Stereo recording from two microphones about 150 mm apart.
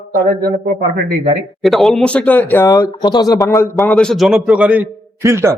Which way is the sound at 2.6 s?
25° left (ahead or behind).